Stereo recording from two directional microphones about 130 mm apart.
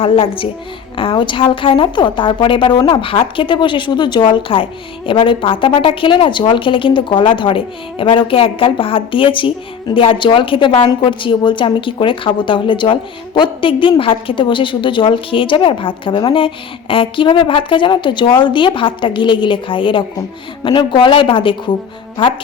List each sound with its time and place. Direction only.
0.0 s a woman's voice: 45° left (ahead or behind)